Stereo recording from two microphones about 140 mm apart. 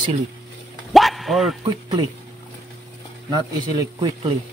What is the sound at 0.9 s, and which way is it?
Bow-wow, centre (ahead or behind).